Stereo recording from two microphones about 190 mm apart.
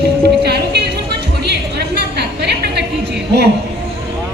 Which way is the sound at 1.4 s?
60° right (ahead or behind).